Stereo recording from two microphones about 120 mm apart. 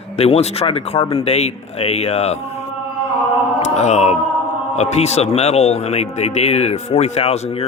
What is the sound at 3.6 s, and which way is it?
Speech, 70° left (ahead or behind).